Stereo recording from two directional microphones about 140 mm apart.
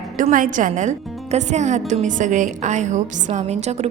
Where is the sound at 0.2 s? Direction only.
70° right (ahead or behind).